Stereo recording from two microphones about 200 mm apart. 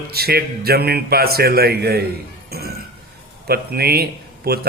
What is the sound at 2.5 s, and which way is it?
Chink, 50° right (ahead or behind).